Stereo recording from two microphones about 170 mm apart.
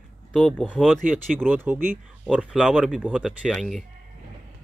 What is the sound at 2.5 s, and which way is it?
Speech, centre (ahead or behind).